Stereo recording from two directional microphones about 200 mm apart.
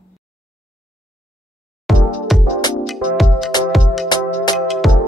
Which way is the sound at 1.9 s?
Centre (ahead or behind).